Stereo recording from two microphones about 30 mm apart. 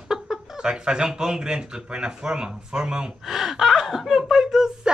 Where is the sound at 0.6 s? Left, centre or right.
Right.